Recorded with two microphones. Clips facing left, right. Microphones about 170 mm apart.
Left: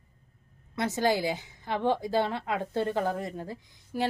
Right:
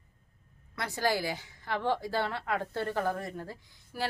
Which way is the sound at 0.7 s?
20° left (ahead or behind).